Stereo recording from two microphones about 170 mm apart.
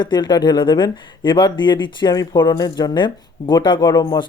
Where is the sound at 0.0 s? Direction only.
25° left (ahead or behind).